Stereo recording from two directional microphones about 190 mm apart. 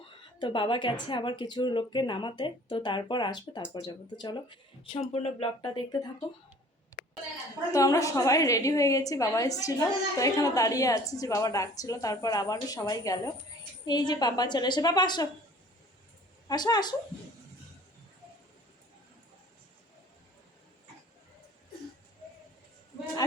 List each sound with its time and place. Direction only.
0.3 s a woman's voice: 25° left (ahead or behind)
7.7 s a woman's voice: 15° left (ahead or behind)
16.5 s a woman's voice: 20° left (ahead or behind)